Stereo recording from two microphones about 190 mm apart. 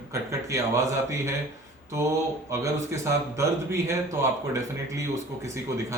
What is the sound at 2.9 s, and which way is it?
Speech, 15° right (ahead or behind).